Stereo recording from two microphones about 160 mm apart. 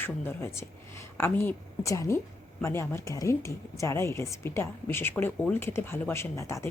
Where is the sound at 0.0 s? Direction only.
15° left (ahead or behind).